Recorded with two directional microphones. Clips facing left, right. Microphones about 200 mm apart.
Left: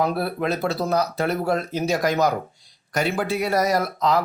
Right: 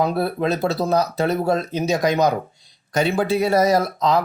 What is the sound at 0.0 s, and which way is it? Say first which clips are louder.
Speech: right 3 dB; 25° right (ahead or behind).